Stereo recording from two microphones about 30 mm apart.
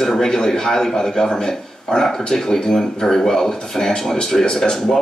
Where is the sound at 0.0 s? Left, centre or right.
Centre.